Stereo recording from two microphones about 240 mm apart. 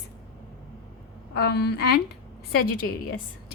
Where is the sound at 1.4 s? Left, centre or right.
Left.